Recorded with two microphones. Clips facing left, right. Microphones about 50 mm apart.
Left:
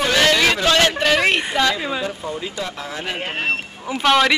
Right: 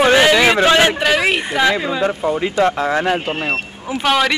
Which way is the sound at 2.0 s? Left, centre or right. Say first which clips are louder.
Right 8 dB; right.